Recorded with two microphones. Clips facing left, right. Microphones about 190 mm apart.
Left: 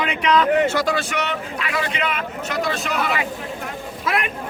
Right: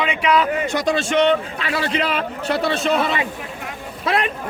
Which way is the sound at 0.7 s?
20° right (ahead or behind).